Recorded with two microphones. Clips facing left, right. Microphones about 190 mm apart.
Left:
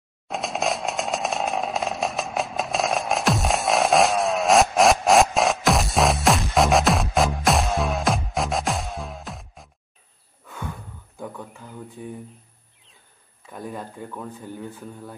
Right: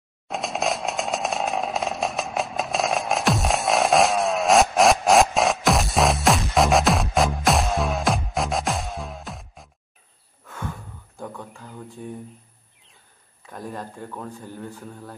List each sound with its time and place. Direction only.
0.3 s chainsaw: centre (ahead or behind)
11.1 s a sound: 5° left (ahead or behind)
13.5 s speech: centre (ahead or behind)